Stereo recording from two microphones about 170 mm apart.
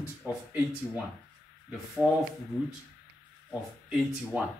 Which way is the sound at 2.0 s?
5° right (ahead or behind).